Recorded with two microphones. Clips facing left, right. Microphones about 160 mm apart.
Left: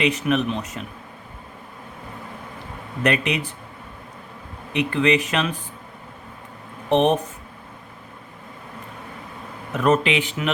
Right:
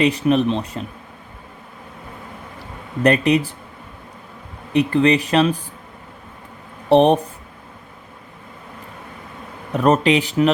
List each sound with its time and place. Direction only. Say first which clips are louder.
0.0 s speech: right 5 dB; 35° right (ahead or behind)
3.0 s speech: right 6 dB; 35° right (ahead or behind)
4.7 s speech: right 4 dB; 35° right (ahead or behind)
6.9 s speech: right 5 dB; 35° right (ahead or behind)
9.7 s speech: right 4 dB; 35° right (ahead or behind)